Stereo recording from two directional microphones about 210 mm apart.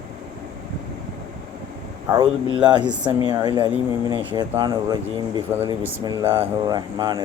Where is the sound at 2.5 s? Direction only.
20° right (ahead or behind).